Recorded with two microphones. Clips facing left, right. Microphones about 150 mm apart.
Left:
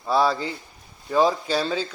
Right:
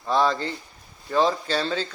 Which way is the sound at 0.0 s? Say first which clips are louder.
Left 1 dB; 10° left (ahead or behind).